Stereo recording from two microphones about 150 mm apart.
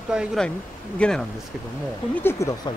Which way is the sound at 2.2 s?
20° left (ahead or behind).